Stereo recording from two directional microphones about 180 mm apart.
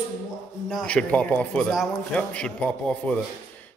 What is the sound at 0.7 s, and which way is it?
A man's voice, 5° left (ahead or behind).